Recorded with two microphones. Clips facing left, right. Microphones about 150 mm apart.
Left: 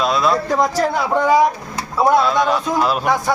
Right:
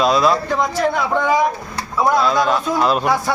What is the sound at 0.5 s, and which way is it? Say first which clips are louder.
Speech: left 1 dB; 40° left (ahead or behind).